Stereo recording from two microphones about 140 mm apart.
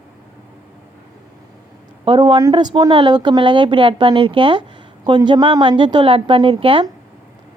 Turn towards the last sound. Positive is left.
turn(degrees=-35)  # may be behind; listen again after turning